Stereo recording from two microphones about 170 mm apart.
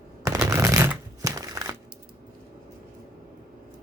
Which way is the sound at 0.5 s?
15° right (ahead or behind).